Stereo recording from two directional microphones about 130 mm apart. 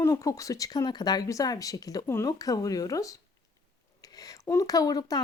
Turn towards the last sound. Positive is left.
turn(degrees=30)  # may be behind; listen again after turning